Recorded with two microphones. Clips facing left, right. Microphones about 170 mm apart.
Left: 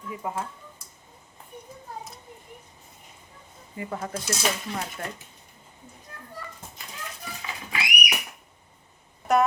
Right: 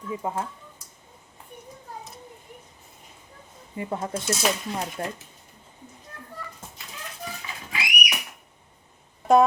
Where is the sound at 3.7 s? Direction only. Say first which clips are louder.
Right 3 dB; 25° right (ahead or behind).